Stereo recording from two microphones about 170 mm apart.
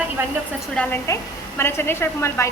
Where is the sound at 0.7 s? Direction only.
5° left (ahead or behind).